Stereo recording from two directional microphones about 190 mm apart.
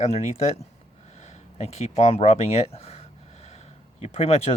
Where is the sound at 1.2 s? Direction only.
35° left (ahead or behind).